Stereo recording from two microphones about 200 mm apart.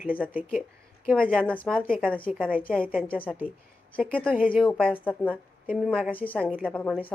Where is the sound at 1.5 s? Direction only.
5° left (ahead or behind).